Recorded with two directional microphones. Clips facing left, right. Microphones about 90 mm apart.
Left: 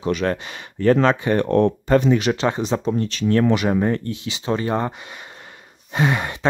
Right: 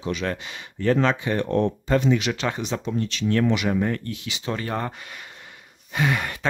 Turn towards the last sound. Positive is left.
turn(degrees=25)  # may be behind; listen again after turning